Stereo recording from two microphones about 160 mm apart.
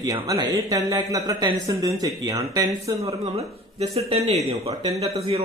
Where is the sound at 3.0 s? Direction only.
40° right (ahead or behind).